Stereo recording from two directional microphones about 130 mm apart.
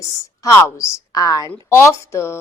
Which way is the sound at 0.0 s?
25° left (ahead or behind).